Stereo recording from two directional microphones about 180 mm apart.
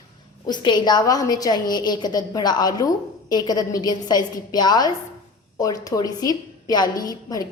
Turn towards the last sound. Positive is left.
turn(degrees=20)  # may be behind; listen again after turning